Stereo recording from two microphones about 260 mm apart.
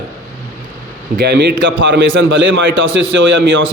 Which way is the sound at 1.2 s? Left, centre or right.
Right.